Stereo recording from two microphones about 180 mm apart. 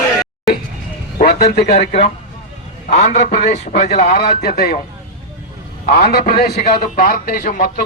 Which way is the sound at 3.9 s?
55° left (ahead or behind).